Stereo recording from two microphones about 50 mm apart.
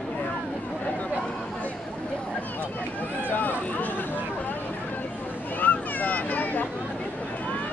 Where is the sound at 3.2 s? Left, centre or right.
Left.